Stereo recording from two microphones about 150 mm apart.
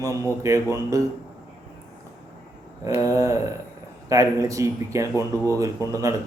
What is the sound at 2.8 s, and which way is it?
A man's voice, 20° right (ahead or behind).